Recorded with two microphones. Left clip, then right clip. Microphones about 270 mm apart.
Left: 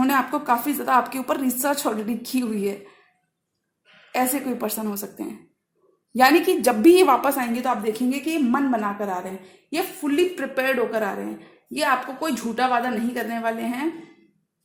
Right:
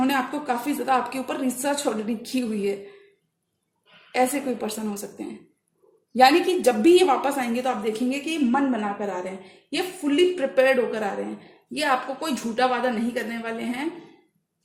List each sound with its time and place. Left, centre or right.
0.0 s a woman's voice: left
4.1 s a woman's voice: left